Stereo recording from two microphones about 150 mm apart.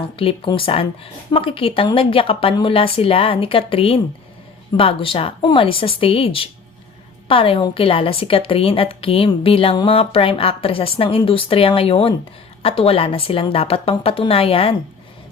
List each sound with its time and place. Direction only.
0.2 s a woman's voice: 35° left (ahead or behind)